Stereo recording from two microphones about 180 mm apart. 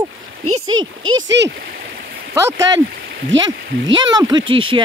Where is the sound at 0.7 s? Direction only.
90° right.